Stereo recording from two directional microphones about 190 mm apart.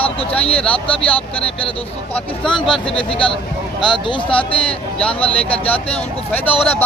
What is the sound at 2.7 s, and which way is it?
A man's voice, 25° left (ahead or behind).